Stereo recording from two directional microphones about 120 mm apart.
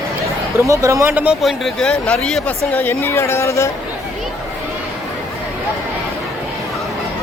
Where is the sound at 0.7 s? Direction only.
25° right (ahead or behind).